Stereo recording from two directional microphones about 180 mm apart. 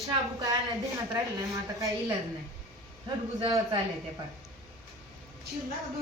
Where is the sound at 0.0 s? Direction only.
20° right (ahead or behind).